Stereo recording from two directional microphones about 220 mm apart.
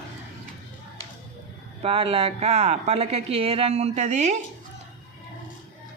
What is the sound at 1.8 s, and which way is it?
Speech, 25° right (ahead or behind).